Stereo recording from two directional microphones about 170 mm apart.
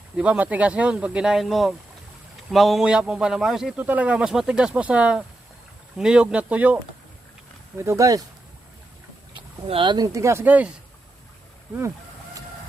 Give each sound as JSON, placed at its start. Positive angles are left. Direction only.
{"t": 0.2, "sound": "a man's voice", "side_deg": -10}
{"t": 7.8, "sound": "speech", "side_deg": -15}
{"t": 9.3, "sound": "speech", "side_deg": -30}